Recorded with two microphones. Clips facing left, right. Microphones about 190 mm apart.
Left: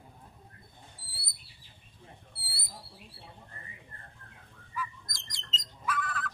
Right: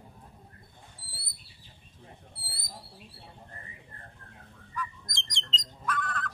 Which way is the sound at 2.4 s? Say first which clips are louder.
Right 2 dB; 40° right (ahead or behind).